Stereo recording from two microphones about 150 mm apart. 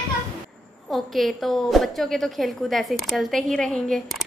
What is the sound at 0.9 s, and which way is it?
A woman's voice, centre (ahead or behind).